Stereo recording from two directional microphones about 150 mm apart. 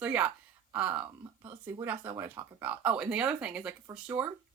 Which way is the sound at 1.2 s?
20° right (ahead or behind).